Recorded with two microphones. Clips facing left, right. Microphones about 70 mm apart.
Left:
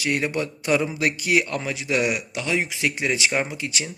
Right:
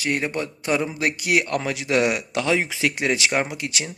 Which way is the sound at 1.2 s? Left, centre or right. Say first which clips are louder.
Right 2 dB; right.